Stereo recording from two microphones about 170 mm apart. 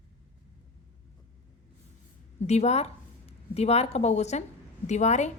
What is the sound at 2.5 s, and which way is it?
A woman's voice, 40° left (ahead or behind).